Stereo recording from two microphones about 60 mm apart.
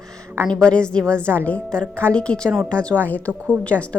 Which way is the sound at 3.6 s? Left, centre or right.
Left.